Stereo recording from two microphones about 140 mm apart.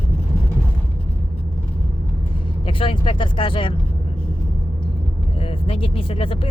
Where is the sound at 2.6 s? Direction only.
40° left (ahead or behind).